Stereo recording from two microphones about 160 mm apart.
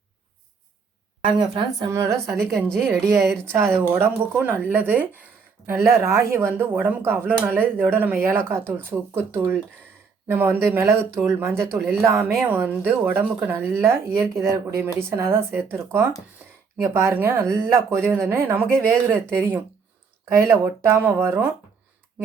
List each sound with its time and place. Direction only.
2.0 s a woman's voice: centre (ahead or behind)
2.9 s speech: 20° right (ahead or behind)